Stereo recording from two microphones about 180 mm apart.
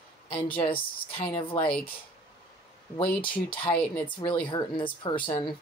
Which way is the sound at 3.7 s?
10° left (ahead or behind).